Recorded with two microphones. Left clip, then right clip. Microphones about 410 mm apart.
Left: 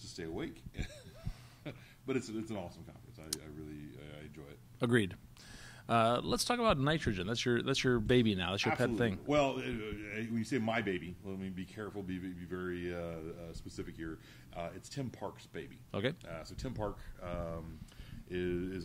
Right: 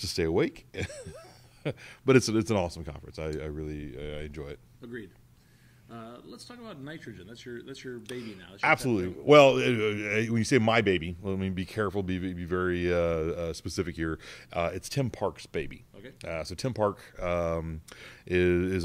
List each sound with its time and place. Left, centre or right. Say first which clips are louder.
0.0 s a man's voice: right 15 dB; right
4.7 s speech: left 10 dB; left
9.2 s a man's voice: right 17 dB; right
15.9 s speech: left 12 dB; left
16.3 s a man's voice: right 11 dB; right